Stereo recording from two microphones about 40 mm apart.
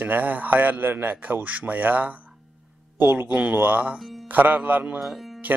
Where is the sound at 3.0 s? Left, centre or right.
Right.